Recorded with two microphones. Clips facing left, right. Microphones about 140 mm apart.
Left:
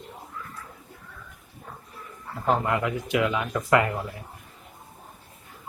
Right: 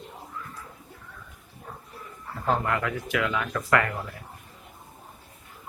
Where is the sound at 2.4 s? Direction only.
20° left (ahead or behind).